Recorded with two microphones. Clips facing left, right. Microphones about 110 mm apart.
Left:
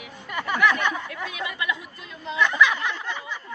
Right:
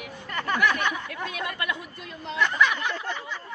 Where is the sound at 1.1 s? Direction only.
55° right (ahead or behind).